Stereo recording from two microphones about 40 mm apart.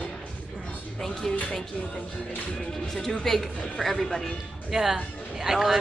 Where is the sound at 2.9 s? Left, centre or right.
Centre.